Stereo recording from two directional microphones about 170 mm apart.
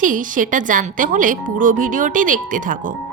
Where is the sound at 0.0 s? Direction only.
50° right (ahead or behind).